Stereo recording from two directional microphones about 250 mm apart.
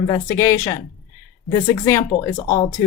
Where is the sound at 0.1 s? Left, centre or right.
Centre.